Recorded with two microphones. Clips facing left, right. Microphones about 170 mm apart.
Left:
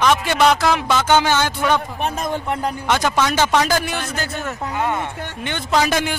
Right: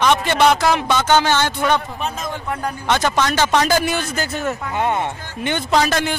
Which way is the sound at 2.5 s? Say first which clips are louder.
Right 1 dB; 20° left (ahead or behind).